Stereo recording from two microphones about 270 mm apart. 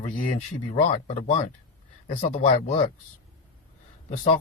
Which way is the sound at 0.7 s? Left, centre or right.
Left.